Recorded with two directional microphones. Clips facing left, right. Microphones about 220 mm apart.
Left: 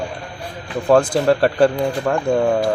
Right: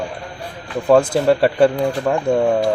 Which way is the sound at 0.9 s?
5° right (ahead or behind).